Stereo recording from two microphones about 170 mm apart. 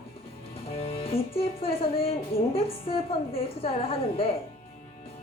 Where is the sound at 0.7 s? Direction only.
35° left (ahead or behind).